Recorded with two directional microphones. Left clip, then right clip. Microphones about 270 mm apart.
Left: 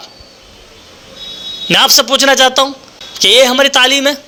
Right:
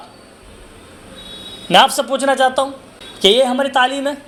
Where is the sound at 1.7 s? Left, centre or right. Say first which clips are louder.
Left 3 dB; left.